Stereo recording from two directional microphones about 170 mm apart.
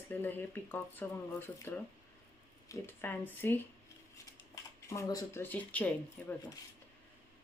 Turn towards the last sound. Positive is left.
turn(degrees=10)  # may be behind; listen again after turning